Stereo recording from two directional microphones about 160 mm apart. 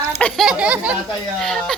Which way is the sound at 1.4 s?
5° left (ahead or behind).